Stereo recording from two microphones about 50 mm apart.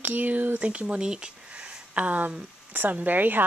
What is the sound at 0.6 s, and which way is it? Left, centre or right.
A woman's voice, right.